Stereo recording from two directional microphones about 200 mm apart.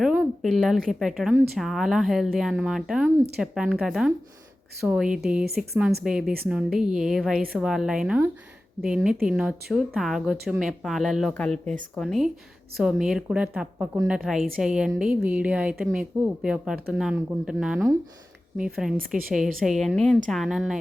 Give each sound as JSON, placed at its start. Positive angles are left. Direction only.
{"t": 0.0, "sound": "a sound", "side_deg": 0}
{"t": 0.9, "sound": "speech", "side_deg": 0}
{"t": 18.9, "sound": "a woman's voice", "side_deg": -45}
{"t": 19.5, "sound": "speech", "side_deg": 0}